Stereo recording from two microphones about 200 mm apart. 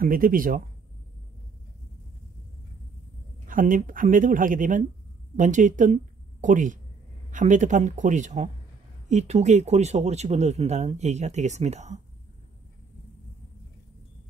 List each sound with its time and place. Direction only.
0.0 s speech: 45° right (ahead or behind)
3.4 s speech: 40° right (ahead or behind)